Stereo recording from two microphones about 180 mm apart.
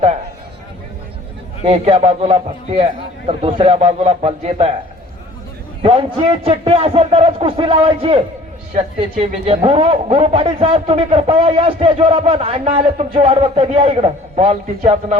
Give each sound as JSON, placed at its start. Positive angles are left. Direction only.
{"t": 1.6, "sound": "speech", "side_deg": -35}
{"t": 5.8, "sound": "speech", "side_deg": -30}